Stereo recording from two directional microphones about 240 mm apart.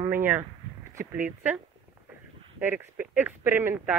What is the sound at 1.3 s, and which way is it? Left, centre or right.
Speech, centre.